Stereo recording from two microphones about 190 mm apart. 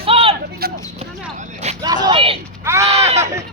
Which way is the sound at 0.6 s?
55° right (ahead or behind).